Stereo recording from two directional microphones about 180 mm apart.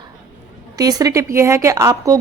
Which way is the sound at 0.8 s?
20° right (ahead or behind).